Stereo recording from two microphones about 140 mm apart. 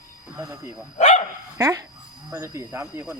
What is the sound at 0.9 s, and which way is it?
Speech, 55° left (ahead or behind).